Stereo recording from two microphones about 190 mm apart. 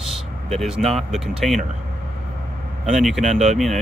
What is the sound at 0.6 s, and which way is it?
Speech, centre (ahead or behind).